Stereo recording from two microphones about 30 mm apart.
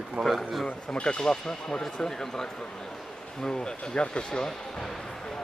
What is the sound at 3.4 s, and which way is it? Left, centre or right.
Speech, left.